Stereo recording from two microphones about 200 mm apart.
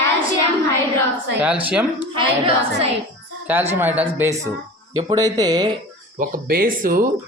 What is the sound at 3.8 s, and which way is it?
Speech, 10° right (ahead or behind).